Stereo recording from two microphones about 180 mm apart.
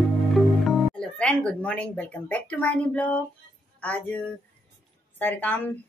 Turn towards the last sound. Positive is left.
turn(degrees=10)  # may be behind; listen again after turning